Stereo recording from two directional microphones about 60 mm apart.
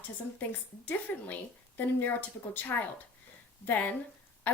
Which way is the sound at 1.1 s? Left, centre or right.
Left.